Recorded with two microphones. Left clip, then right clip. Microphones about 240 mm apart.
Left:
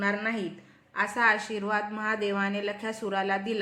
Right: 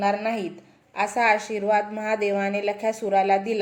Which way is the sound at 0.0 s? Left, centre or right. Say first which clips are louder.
Right 5 dB; right.